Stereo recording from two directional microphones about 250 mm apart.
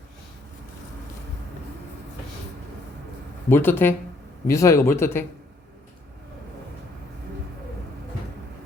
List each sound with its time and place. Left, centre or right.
3.5 s speech: centre